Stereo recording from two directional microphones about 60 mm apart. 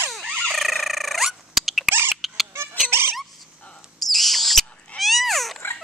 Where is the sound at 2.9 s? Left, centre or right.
Right.